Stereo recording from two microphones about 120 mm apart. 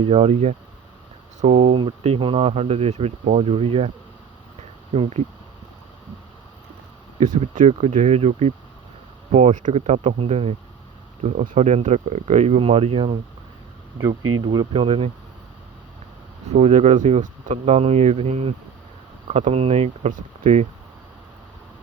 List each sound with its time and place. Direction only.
0.0 s speech: 55° right (ahead or behind)
4.9 s speech: 65° right (ahead or behind)
7.5 s speech: 75° right (ahead or behind)
9.3 s speech: 80° right; by 10.5 s 60° right (ahead or behind)
11.2 s speech: 70° right (ahead or behind); by 13.1 s 50° right (ahead or behind)
14.0 s speech: 35° right (ahead or behind); by 15.1 s 55° right (ahead or behind)
16.5 s speech: 65° right (ahead or behind)